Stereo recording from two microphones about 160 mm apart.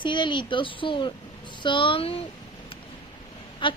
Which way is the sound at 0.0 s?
30° left (ahead or behind).